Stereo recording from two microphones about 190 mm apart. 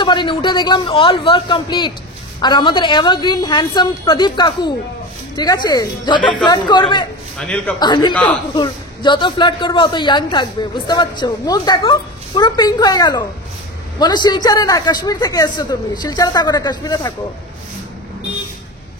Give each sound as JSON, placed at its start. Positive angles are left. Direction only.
{"t": 0.0, "sound": "a woman's voice", "side_deg": 25}
{"t": 7.3, "sound": "a man's voice", "side_deg": 5}
{"t": 7.8, "sound": "a woman's voice", "side_deg": 20}